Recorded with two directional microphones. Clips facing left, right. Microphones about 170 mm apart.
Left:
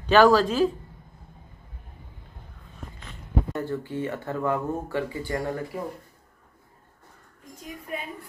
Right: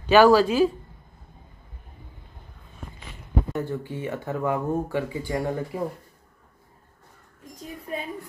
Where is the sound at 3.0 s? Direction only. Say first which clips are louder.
Even; 10° right (ahead or behind).